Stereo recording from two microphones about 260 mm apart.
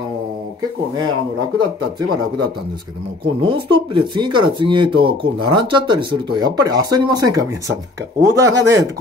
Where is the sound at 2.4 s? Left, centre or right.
Centre.